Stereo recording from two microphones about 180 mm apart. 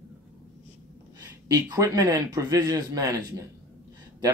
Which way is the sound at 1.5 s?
20° right (ahead or behind).